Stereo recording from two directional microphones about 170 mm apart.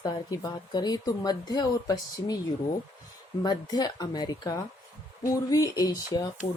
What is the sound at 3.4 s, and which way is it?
A woman's voice, 25° left (ahead or behind).